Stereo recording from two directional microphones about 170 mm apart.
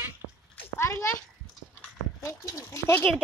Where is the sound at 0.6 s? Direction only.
15° left (ahead or behind).